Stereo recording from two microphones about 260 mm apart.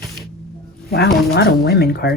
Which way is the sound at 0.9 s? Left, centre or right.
Left.